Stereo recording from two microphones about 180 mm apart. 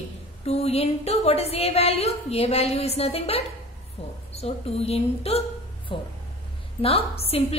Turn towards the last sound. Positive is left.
turn(degrees=35)  # may be behind; listen again after turning